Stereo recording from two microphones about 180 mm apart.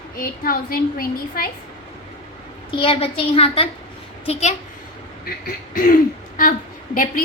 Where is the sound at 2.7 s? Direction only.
30° left (ahead or behind).